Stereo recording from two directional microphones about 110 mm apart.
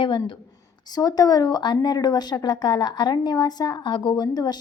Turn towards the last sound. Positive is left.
turn(degrees=40)  # may be behind; listen again after turning